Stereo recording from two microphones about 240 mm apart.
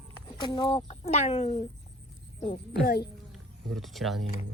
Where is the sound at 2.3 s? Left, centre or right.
Left.